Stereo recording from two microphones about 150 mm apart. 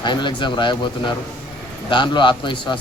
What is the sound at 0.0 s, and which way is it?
Speech, 30° left (ahead or behind).